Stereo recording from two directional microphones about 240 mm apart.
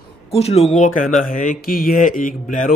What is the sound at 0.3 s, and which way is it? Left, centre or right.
Speech, left.